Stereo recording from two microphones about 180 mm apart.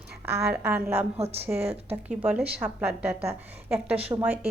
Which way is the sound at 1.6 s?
35° right (ahead or behind).